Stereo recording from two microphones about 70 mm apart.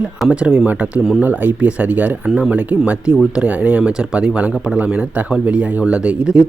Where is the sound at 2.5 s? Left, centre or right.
Centre.